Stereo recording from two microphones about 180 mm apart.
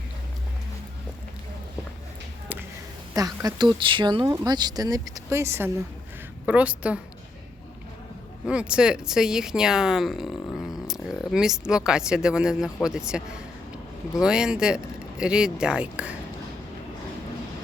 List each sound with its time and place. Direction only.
3.2 s a woman's voice: 20° right (ahead or behind)
8.4 s speech: 5° right (ahead or behind)